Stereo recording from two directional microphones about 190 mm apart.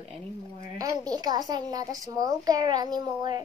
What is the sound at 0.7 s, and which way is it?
A woman's voice, 20° right (ahead or behind).